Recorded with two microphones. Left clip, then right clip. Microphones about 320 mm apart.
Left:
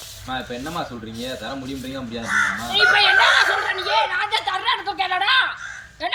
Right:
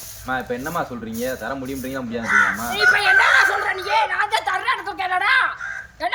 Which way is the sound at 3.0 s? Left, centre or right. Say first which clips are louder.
Right 1 dB; centre.